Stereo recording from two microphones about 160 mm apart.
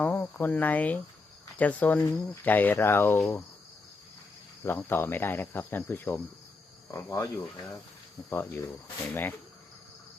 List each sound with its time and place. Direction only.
0.0 s speech: 10° left (ahead or behind)
4.6 s speech: 15° left (ahead or behind)
8.3 s speech: 10° left (ahead or behind)